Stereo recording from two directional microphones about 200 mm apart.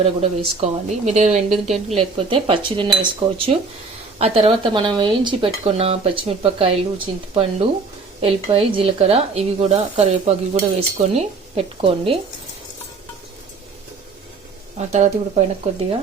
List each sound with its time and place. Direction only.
0.0 s speech: 30° right (ahead or behind)
14.8 s speech: 35° right (ahead or behind)